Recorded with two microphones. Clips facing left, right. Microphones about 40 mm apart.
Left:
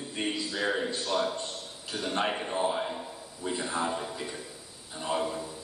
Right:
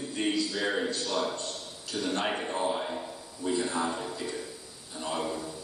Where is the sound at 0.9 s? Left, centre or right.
Centre.